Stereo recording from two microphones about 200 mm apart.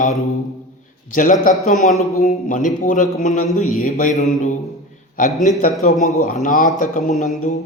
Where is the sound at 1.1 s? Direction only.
40° left (ahead or behind).